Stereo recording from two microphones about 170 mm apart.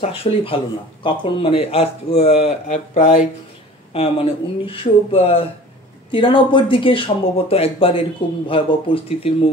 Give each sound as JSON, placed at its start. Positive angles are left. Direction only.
{"t": 0.0, "sound": "speech", "side_deg": 35}
{"t": 3.9, "sound": "speech", "side_deg": 35}